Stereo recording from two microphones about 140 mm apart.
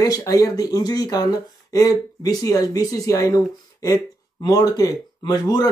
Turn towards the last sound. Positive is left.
turn(degrees=30)  # may be behind; listen again after turning